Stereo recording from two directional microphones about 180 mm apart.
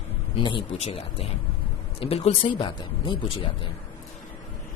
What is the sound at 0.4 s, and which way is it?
Speech, 30° left (ahead or behind).